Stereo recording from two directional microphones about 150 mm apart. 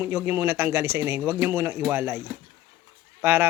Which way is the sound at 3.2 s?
15° right (ahead or behind).